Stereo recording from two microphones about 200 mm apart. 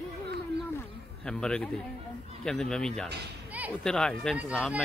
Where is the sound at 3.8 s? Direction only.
5° left (ahead or behind).